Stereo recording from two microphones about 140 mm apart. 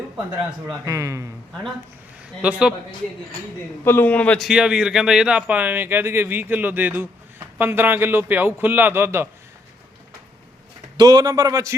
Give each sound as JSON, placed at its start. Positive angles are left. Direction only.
{"t": 0.9, "sound": "a man's voice", "side_deg": -20}
{"t": 2.4, "sound": "speech", "side_deg": -10}
{"t": 3.8, "sound": "a man's voice", "side_deg": 15}
{"t": 4.4, "sound": "speech", "side_deg": -5}
{"t": 10.9, "sound": "a man's voice", "side_deg": -30}